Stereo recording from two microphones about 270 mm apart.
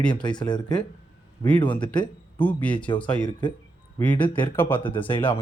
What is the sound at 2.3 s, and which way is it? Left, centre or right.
A man's voice, centre.